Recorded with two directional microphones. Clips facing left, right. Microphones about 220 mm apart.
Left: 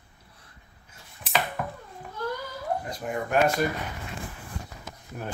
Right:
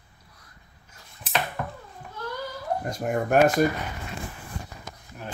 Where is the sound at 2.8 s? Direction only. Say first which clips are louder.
Right 5 dB; 45° right (ahead or behind).